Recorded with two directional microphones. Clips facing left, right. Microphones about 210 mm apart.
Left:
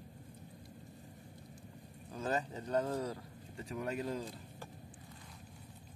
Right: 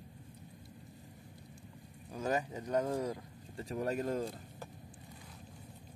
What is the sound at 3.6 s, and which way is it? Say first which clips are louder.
Speech: right 3 dB; 35° right (ahead or behind).